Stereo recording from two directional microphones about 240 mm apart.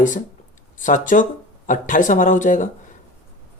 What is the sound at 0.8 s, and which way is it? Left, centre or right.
Speech, left.